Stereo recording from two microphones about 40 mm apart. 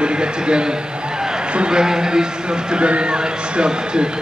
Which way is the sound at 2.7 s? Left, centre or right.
Right.